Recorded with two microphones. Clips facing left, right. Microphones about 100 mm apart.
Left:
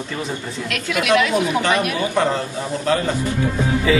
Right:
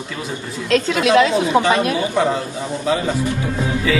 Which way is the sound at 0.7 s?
30° right (ahead or behind).